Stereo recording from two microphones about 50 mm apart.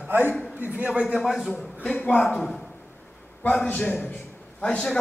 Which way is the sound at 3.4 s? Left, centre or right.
Left.